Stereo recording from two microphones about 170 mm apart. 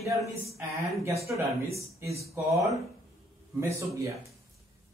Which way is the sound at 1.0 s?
15° right (ahead or behind).